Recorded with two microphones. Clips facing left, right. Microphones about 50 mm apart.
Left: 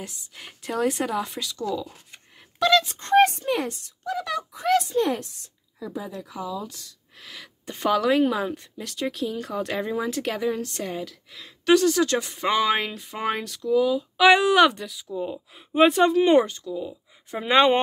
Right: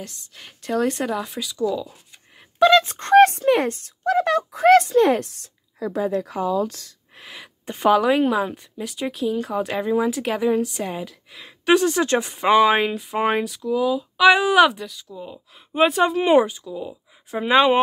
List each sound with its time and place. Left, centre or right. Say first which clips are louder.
0.0 s speech: right 1 dB; centre
2.6 s speech: right 5 dB; right
3.0 s speech: right 5 dB; right
7.2 s speech: right 3 dB; right; by 17.7 s centre